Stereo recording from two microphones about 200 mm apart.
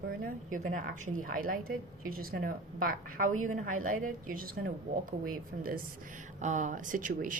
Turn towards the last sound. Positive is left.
turn(degrees=-40)  # may be behind; listen again after turning